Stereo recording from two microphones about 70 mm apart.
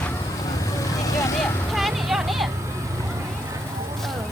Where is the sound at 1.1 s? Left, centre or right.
Left.